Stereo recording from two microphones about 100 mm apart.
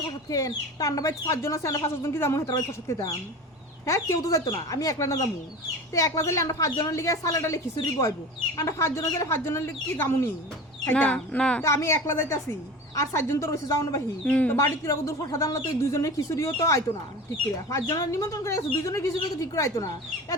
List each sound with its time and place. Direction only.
0.3 s speech: 35° left (ahead or behind); by 11.6 s 10° left (ahead or behind)
11.6 s speech: 30° left (ahead or behind)
14.3 s speech: 15° left (ahead or behind)
14.5 s speech: 30° left (ahead or behind)